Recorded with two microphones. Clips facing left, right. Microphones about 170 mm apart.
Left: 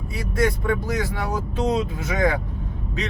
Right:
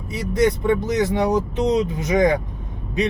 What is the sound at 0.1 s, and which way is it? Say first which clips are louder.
Speech: right 4 dB; 20° right (ahead or behind).